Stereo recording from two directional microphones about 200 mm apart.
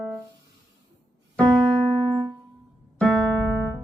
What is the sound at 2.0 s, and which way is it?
Music, 20° right (ahead or behind).